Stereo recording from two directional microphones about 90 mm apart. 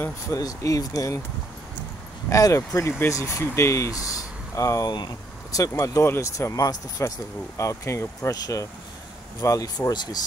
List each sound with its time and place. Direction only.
0.4 s speech: 40° left (ahead or behind)
2.2 s speech: 35° left (ahead or behind)
5.7 s speech: 30° left (ahead or behind)